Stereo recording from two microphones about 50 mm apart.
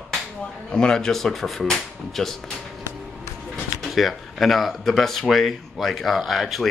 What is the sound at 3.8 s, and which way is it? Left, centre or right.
Speech, centre.